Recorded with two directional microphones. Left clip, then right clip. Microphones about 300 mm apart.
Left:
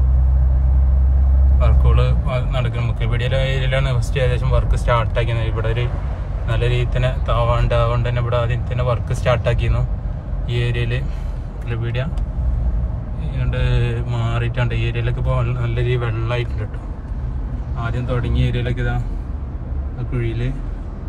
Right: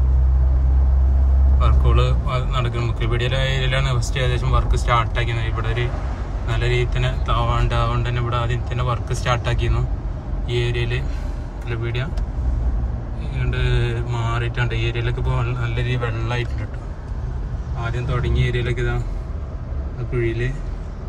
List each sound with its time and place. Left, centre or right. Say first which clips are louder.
1.6 s a man's voice: even; centre
13.2 s speech: even; centre
18.4 s speech: right 1 dB; centre